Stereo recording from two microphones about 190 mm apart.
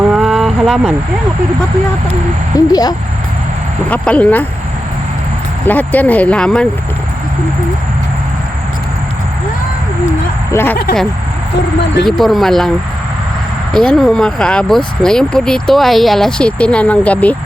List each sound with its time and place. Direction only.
0.1 s a sound: centre (ahead or behind)
2.5 s speech: 20° left (ahead or behind)
3.8 s speech: 5° left (ahead or behind)
5.6 s speech: 10° left (ahead or behind)
10.5 s speech: 10° left (ahead or behind)
12.0 s speech: centre (ahead or behind)
13.7 s speech: centre (ahead or behind)